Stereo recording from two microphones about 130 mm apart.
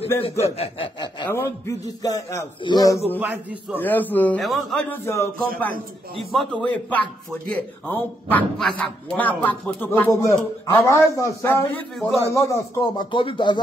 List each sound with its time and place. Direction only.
0.2 s speech: 50° left (ahead or behind)
1.3 s a man's voice: 20° left (ahead or behind)
3.7 s speech: 15° left (ahead or behind)
4.4 s a man's voice: centre (ahead or behind)
4.7 s a man's voice: 20° left (ahead or behind)
6.1 s speech: centre (ahead or behind); by 11.5 s 25° left (ahead or behind)
11.7 s a man's voice: 5° left (ahead or behind)
12.3 s a man's voice: 25° left (ahead or behind)
13.1 s music: 40° left (ahead or behind)